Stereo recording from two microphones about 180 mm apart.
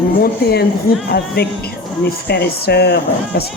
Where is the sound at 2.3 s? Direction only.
65° left (ahead or behind).